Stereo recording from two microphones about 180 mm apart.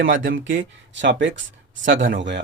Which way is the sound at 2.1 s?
80° right.